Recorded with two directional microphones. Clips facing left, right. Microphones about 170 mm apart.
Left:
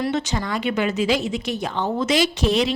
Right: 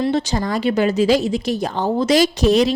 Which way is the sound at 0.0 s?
35° right (ahead or behind).